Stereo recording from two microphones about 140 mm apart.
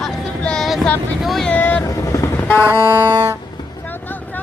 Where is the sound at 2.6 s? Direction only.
15° right (ahead or behind).